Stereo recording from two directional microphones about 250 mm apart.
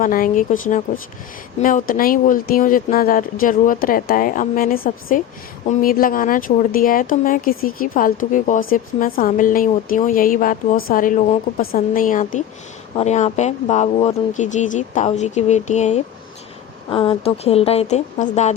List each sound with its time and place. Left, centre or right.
0.0 s speech: left